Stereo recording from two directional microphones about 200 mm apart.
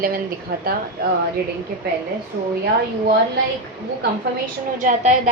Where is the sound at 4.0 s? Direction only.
40° right (ahead or behind).